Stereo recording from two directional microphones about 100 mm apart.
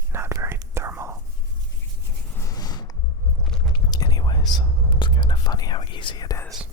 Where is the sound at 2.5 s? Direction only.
40° left (ahead or behind).